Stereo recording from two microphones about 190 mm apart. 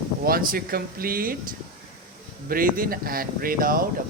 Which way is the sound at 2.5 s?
45° right (ahead or behind).